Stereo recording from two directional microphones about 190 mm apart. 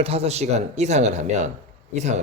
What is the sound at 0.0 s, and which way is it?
Speech, 30° right (ahead or behind).